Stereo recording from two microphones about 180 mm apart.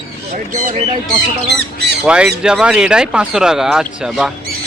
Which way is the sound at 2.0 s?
5° right (ahead or behind).